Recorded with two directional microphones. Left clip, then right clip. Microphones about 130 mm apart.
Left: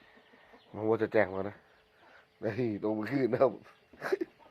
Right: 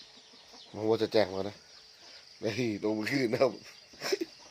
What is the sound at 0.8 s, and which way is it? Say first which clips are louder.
Speech: right 1 dB; 30° right (ahead or behind).